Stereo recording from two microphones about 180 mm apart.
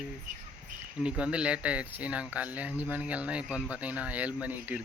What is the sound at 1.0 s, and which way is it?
Speech, 5° right (ahead or behind).